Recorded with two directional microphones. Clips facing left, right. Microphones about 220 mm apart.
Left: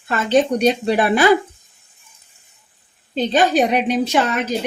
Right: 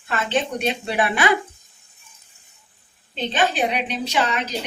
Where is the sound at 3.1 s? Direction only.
40° left (ahead or behind).